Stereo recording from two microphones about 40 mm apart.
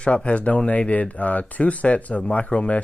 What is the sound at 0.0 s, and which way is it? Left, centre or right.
Speech, left.